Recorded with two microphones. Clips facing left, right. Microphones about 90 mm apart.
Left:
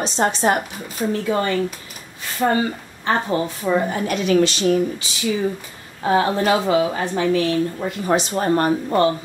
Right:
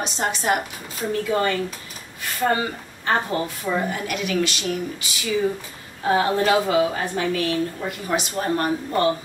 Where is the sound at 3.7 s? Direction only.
35° left (ahead or behind).